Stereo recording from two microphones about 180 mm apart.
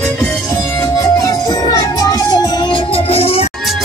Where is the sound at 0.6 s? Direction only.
15° left (ahead or behind); by 3.5 s 35° left (ahead or behind).